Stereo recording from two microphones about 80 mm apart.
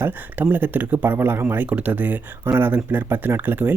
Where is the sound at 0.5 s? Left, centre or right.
Right.